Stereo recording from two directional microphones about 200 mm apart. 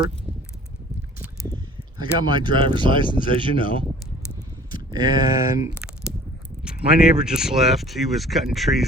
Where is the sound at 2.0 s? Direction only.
20° right (ahead or behind).